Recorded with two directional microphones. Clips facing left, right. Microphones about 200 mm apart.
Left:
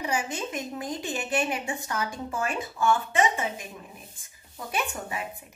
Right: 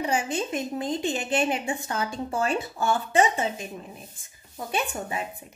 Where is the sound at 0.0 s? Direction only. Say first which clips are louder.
Right 3 dB; 30° right (ahead or behind).